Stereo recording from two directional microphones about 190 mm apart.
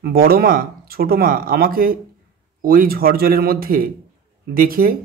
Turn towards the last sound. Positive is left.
turn(degrees=-50)  # may be behind; listen again after turning